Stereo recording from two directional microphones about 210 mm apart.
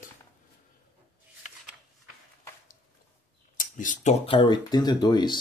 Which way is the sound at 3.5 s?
40° left (ahead or behind).